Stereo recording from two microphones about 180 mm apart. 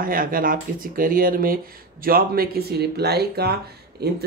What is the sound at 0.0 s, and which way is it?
Speech, 50° right (ahead or behind).